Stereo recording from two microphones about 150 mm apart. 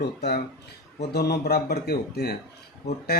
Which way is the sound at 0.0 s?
90° left.